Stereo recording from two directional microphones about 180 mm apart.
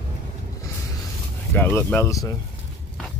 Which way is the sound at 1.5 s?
10° left (ahead or behind).